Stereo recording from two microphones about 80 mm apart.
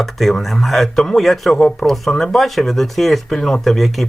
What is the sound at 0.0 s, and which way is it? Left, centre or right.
Speech, centre.